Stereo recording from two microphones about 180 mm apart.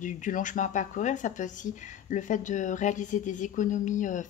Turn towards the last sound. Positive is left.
turn(degrees=45)  # may be behind; listen again after turning